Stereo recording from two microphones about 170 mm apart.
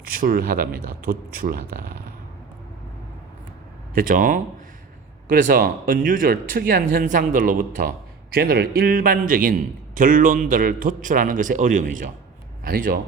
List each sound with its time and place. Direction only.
0.0 s speech: 55° right (ahead or behind)
3.9 s a man's voice: 55° right (ahead or behind)
8.3 s a man's voice: 65° right (ahead or behind); by 12.1 s 50° right (ahead or behind)
12.6 s speech: 60° right (ahead or behind)